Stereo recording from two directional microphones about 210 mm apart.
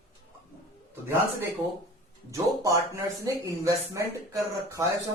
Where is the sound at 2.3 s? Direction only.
15° right (ahead or behind).